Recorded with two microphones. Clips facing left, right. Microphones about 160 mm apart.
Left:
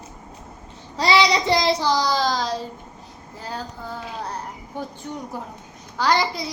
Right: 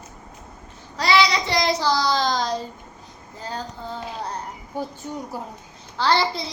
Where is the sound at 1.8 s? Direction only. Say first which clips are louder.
Even; 15° left (ahead or behind).